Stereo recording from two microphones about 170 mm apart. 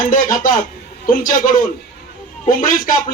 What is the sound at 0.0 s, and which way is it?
A man's voice, 50° left (ahead or behind).